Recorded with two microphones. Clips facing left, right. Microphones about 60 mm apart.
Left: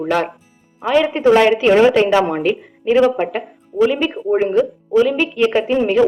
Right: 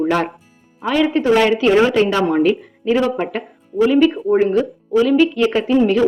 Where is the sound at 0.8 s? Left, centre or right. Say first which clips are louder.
Left 2 dB; centre.